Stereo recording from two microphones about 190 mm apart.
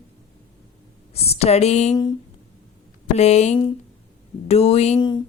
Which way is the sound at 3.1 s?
35° left (ahead or behind).